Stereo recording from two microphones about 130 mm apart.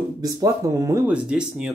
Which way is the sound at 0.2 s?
30° right (ahead or behind).